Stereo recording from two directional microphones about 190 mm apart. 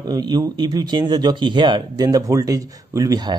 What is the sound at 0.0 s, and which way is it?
Speech, 20° right (ahead or behind).